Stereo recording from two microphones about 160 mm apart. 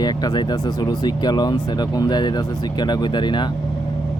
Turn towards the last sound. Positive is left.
turn(degrees=30)  # may be behind; listen again after turning